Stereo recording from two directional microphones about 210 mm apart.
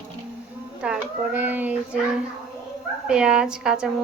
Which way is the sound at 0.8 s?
5° right (ahead or behind).